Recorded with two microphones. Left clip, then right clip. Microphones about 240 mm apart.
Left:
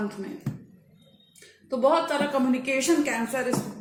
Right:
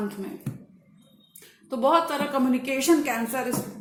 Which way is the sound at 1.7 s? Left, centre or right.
Right.